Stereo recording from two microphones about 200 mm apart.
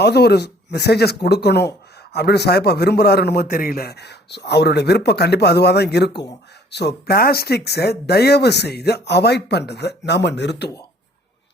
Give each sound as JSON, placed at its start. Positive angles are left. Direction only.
{"t": 0.0, "sound": "a man's voice", "side_deg": 55}